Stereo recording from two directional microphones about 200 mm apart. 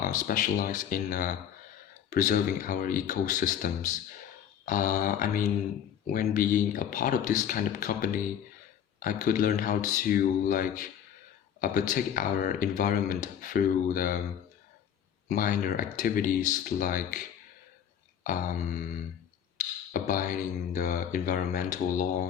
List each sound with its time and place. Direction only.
0.0 s speech: 45° left (ahead or behind)
15.3 s speech: 45° left (ahead or behind)
19.5 s speech: 40° left (ahead or behind)